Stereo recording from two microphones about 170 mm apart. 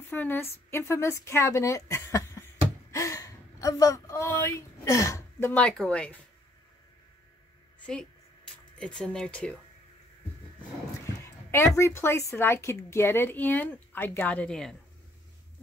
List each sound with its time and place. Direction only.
0.1 s a woman's voice: 10° left (ahead or behind)
7.8 s speech: 5° left (ahead or behind)
11.1 s speech: 15° left (ahead or behind)